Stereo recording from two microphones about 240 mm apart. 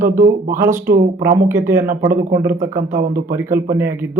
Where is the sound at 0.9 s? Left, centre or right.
Right.